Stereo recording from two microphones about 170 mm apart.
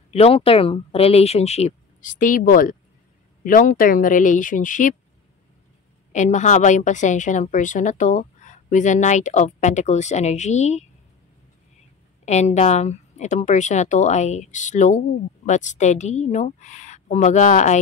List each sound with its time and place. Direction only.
0.1 s speech: 35° left (ahead or behind)
6.1 s speech: 45° left (ahead or behind)
12.3 s speech: 40° left (ahead or behind)